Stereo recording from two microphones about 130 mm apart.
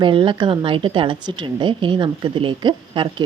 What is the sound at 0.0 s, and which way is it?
Speech, 40° right (ahead or behind).